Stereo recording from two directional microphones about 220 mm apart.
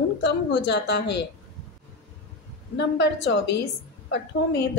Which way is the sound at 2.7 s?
50° left (ahead or behind).